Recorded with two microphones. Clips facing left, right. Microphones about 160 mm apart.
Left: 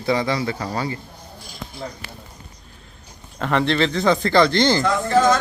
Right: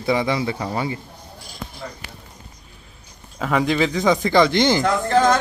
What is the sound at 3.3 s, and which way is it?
Speech, 5° right (ahead or behind).